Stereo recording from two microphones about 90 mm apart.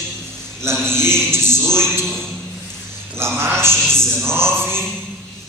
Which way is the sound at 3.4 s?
25° right (ahead or behind).